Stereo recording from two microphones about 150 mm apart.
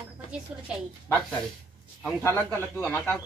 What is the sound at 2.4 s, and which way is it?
Speech, 10° left (ahead or behind).